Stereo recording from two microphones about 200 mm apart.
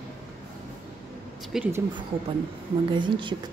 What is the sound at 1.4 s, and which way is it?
Speech, centre (ahead or behind).